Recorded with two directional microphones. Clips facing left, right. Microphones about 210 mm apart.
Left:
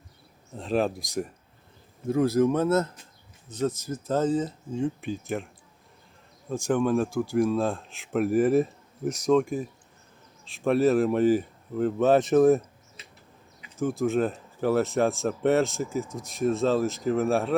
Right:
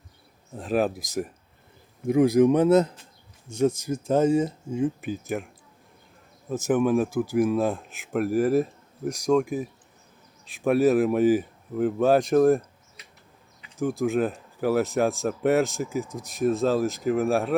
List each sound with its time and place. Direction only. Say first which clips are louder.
0.5 s speech: right 1 dB; 5° right (ahead or behind)
2.0 s speech: right 4 dB; 15° right (ahead or behind)
6.5 s speech: right 2 dB; 5° right (ahead or behind)
13.7 s speech: right 1 dB; centre (ahead or behind)